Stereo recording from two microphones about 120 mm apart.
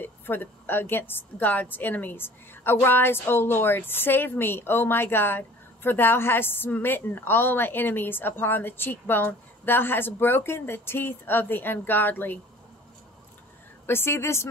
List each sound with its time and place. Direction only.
0.0 s a woman's voice: 15° left (ahead or behind)
13.8 s a woman's voice: 20° left (ahead or behind)